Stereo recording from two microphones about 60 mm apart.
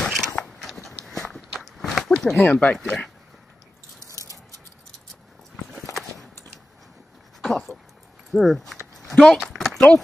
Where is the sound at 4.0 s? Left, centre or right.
Right.